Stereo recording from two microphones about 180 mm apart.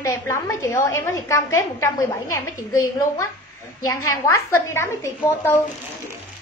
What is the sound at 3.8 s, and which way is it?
A woman's voice, 15° left (ahead or behind).